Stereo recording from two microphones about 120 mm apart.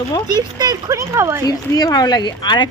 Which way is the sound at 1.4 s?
30° left (ahead or behind).